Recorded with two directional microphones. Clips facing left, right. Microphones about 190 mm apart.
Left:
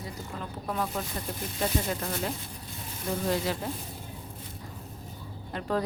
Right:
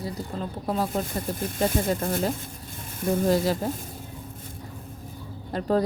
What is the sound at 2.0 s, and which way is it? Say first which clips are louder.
A woman's voice: right 6 dB; 50° right (ahead or behind).